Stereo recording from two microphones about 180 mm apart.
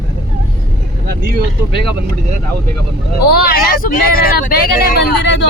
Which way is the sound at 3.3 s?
55° left (ahead or behind).